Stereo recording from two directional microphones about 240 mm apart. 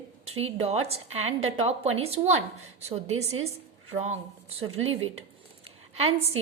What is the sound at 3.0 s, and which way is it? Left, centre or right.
Speech, right.